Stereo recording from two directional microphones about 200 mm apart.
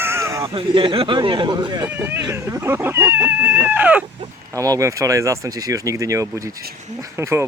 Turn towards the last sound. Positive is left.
turn(degrees=-15)  # may be behind; listen again after turning